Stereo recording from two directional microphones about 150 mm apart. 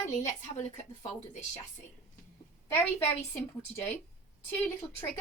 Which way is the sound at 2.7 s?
15° left (ahead or behind).